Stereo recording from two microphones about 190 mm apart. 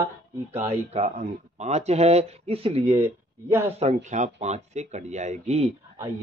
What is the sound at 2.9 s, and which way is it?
Speech, 15° right (ahead or behind).